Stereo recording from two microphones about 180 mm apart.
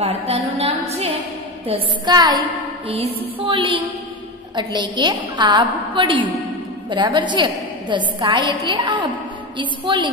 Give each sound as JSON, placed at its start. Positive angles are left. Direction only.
{"t": 0.0, "sound": "a woman's voice", "side_deg": -35}
{"t": 1.7, "sound": "a woman's voice", "side_deg": -20}